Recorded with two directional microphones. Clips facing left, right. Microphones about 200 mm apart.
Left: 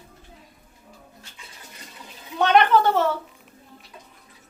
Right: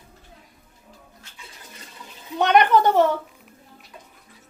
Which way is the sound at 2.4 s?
15° right (ahead or behind).